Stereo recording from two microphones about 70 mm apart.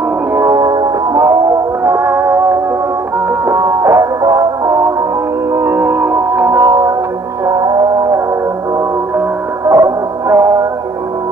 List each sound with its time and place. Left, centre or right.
0.6 s music: right
1.9 s music: right
3.4 s music: right
4.2 s music: right
5.6 s music: right
6.5 s music: right
7.5 s music: right
9.7 s music: right